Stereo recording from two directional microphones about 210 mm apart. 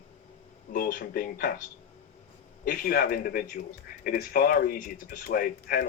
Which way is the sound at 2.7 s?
45° left (ahead or behind).